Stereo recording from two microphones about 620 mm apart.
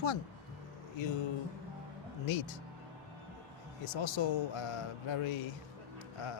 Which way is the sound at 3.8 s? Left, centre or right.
Left.